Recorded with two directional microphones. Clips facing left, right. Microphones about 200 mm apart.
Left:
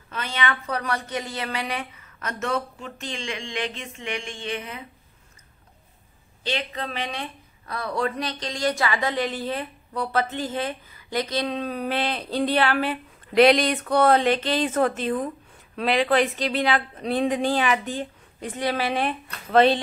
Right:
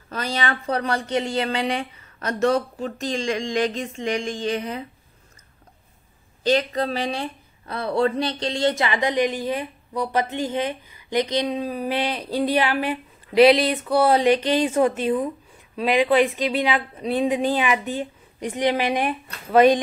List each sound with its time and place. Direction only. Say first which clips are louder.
0.1 s speech: right 2 dB; 35° right (ahead or behind)
6.4 s speech: right 9 dB; 40° right (ahead or behind); by 19.8 s 10° right (ahead or behind)